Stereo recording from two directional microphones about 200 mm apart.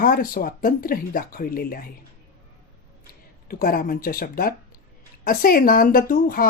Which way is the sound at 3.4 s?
45° left (ahead or behind).